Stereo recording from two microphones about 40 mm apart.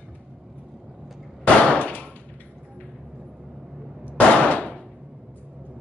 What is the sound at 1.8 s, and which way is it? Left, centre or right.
Gunshot, left.